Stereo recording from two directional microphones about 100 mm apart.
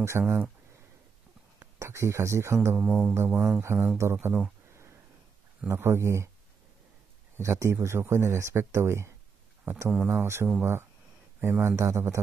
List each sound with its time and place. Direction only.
0.2 s music: 5° right (ahead or behind)
1.6 s speech: 30° right (ahead or behind)
2.8 s music: 5° right (ahead or behind)
3.6 s speech: 20° right (ahead or behind)
5.7 s speech: 25° right (ahead or behind)
7.3 s speech: 30° right (ahead or behind)
9.8 s music: 10° right (ahead or behind)
10.2 s a man's voice: 25° right (ahead or behind)